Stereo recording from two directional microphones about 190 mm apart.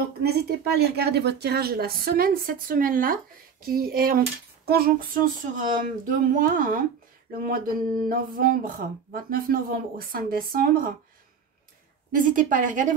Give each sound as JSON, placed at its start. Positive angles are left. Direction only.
{"t": 0.2, "sound": "speech", "side_deg": -60}
{"t": 12.4, "sound": "speech", "side_deg": -45}